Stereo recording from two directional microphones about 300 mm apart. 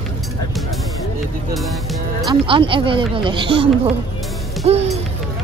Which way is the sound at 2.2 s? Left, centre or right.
Centre.